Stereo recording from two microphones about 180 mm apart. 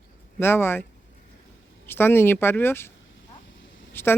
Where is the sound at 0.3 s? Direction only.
15° left (ahead or behind).